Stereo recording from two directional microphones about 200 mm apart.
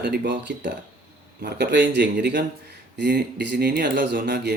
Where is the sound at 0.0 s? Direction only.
55° right (ahead or behind).